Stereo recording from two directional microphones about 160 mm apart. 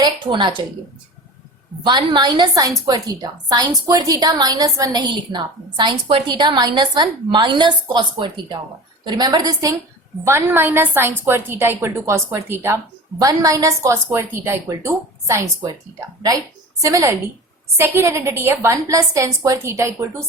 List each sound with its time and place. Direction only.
0.0 s a woman's voice: 30° right (ahead or behind)
1.8 s a woman's voice: 25° right (ahead or behind)